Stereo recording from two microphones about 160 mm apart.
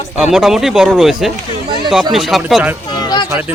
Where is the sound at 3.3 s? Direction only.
10° right (ahead or behind).